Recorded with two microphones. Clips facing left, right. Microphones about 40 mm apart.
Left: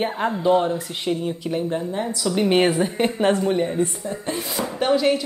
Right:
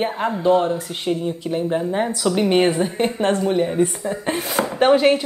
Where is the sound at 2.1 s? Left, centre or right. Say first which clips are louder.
Right 3 dB; right.